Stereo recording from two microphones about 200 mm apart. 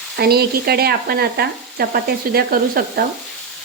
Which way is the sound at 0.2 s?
50° right (ahead or behind).